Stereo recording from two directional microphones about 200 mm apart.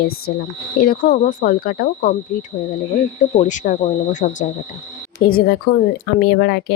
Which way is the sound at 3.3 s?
40° left (ahead or behind).